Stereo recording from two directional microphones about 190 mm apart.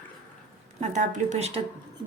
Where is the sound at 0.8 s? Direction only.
35° right (ahead or behind).